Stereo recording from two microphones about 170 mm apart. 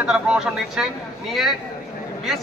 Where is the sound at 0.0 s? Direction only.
5° right (ahead or behind).